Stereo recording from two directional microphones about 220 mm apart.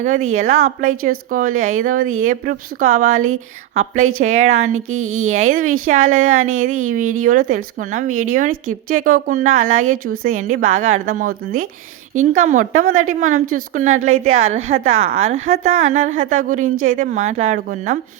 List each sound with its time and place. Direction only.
0.6 s a woman's voice: 35° right (ahead or behind)
4.9 s a woman's voice: 70° right (ahead or behind)
5.3 s a woman's voice: 35° right (ahead or behind)
14.1 s a woman's voice: 70° right (ahead or behind)
14.4 s a woman's voice: 30° right (ahead or behind)